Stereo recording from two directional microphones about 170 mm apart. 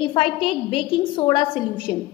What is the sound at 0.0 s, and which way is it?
A woman's voice, 30° left (ahead or behind).